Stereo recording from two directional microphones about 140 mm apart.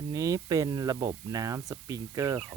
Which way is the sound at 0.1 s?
25° right (ahead or behind).